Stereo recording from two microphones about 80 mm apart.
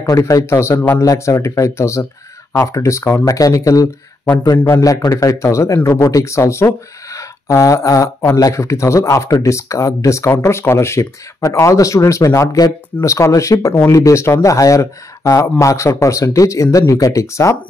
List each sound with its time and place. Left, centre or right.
0.0 s speech: left